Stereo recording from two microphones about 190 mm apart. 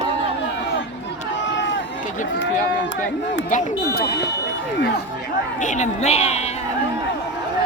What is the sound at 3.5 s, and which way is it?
Speech, 45° left (ahead or behind).